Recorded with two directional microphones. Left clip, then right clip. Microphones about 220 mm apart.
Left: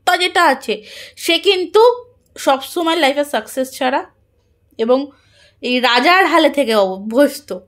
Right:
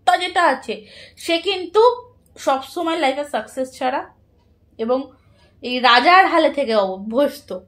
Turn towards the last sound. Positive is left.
turn(degrees=35)  # may be behind; listen again after turning